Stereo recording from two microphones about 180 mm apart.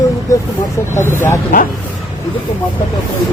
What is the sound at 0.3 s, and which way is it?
Speech, 20° left (ahead or behind).